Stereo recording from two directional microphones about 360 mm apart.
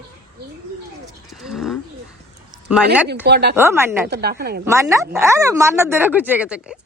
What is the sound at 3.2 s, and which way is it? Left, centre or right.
Speech, right.